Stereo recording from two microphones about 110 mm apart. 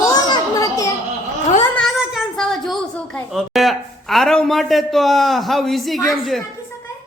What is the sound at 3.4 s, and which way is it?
A man's voice, centre (ahead or behind).